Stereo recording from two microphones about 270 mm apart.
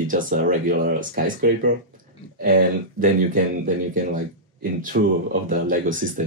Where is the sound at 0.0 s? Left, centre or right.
Right.